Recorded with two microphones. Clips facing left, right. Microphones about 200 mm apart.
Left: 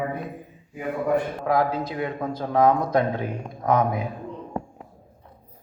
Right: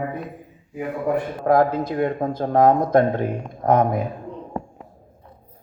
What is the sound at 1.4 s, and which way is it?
A man's voice, 50° right (ahead or behind).